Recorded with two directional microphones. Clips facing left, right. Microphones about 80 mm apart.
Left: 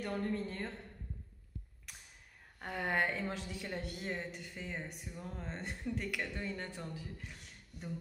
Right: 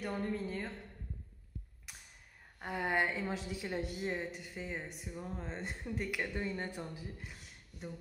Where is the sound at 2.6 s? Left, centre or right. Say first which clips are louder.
Right 1 dB; centre.